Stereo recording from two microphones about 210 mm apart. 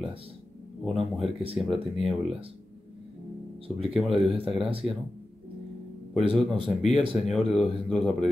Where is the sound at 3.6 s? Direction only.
25° right (ahead or behind).